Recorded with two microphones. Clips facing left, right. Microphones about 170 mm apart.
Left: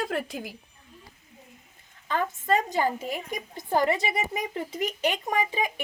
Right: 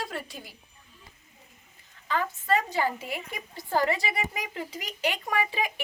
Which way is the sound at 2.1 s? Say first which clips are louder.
Left 1 dB; 45° left (ahead or behind).